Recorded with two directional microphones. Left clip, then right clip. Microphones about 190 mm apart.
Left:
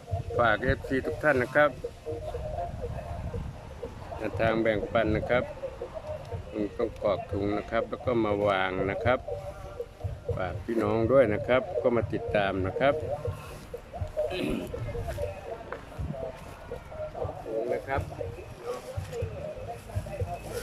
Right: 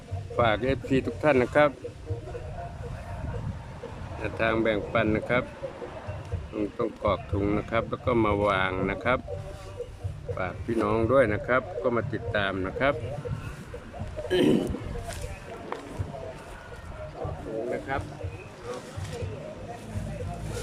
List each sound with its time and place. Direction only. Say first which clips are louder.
0.3 s speech: right 1 dB; 10° right (ahead or behind)
4.2 s speech: right 1 dB; centre (ahead or behind)
6.7 s speech: right 1 dB; 5° right (ahead or behind)
10.3 s speech: right 2 dB; centre (ahead or behind)
14.3 s speech: right 8 dB; 35° right (ahead or behind)
17.7 s music: even; centre (ahead or behind)